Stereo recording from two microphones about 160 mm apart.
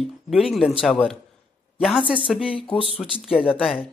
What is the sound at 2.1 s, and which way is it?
Speech, 5° right (ahead or behind).